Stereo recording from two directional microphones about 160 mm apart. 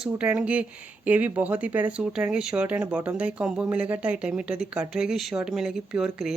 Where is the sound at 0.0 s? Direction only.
10° right (ahead or behind).